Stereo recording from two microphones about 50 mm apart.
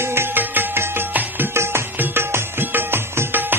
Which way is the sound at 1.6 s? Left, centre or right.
Right.